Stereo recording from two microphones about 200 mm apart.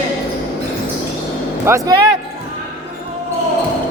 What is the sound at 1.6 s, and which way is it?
Speech, 15° right (ahead or behind).